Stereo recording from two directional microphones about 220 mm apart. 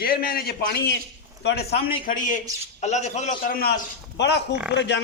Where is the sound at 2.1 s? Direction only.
35° left (ahead or behind).